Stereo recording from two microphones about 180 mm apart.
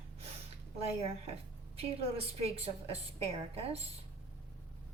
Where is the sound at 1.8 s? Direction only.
35° right (ahead or behind).